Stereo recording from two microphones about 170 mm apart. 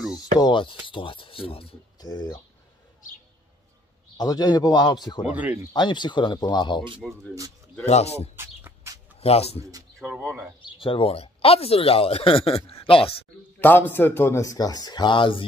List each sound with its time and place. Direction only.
0.4 s a man's voice: 30° left (ahead or behind)
2.0 s speech: 25° left (ahead or behind)
4.2 s a man's voice: 25° left (ahead or behind)
5.3 s speech: 10° right (ahead or behind)
5.7 s a man's voice: 25° left (ahead or behind)
7.0 s speech: centre (ahead or behind)
7.8 s speech: 40° left (ahead or behind)
8.4 s bird: 15° right (ahead or behind)
9.2 s speech: 35° left (ahead or behind)
10.2 s speech: centre (ahead or behind)
10.6 s speech: 30° left (ahead or behind)
13.6 s a man's voice: 10° left (ahead or behind); by 15.4 s 30° left (ahead or behind)